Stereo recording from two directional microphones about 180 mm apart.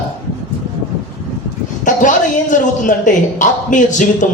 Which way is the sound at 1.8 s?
45° left (ahead or behind).